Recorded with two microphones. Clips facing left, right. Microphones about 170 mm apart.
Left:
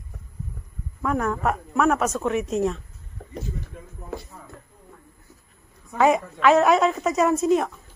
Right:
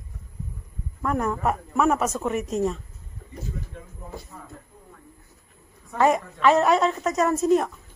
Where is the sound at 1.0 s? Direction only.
Centre (ahead or behind).